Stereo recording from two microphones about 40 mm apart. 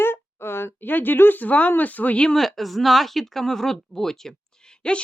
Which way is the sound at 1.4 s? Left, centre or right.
Left.